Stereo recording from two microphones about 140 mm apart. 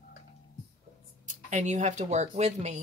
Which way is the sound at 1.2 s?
55° right (ahead or behind).